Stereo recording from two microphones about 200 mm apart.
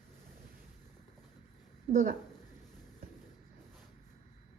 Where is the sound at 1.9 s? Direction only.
35° right (ahead or behind).